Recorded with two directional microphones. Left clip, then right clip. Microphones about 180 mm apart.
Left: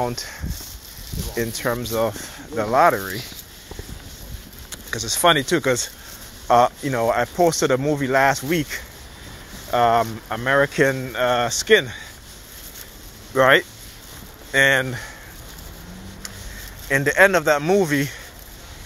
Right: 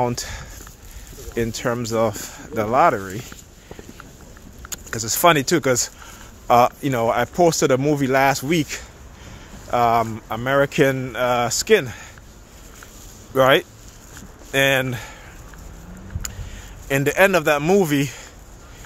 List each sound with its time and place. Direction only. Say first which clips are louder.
1.3 s speech: right 1 dB; 75° right (ahead or behind); by 3.2 s 45° right (ahead or behind)
4.6 s speech: even; 60° right (ahead or behind)
13.3 s speech: even; 55° right (ahead or behind)
16.8 s speech: left 1 dB; 55° right (ahead or behind)